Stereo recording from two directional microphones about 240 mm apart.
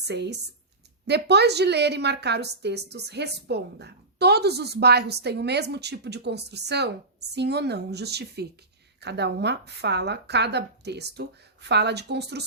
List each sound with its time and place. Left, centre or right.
0.1 s a woman's voice: right